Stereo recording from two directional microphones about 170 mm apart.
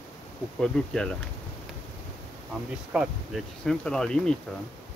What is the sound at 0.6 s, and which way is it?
Speech, 5° left (ahead or behind).